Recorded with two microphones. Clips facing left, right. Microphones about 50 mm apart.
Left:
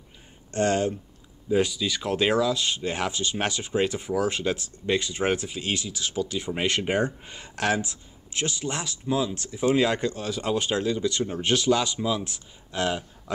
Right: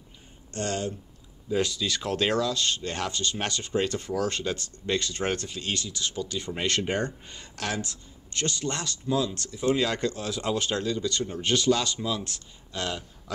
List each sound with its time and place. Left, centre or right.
0.5 s speech: left
1.5 s speech: centre